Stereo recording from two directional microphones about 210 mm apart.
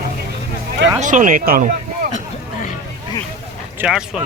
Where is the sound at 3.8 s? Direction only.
Centre (ahead or behind).